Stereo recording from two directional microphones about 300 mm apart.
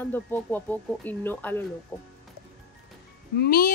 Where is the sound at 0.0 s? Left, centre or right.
Centre.